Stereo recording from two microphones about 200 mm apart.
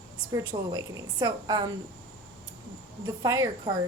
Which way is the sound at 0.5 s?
20° right (ahead or behind).